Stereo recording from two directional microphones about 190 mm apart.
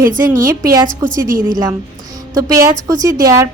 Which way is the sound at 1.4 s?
20° right (ahead or behind).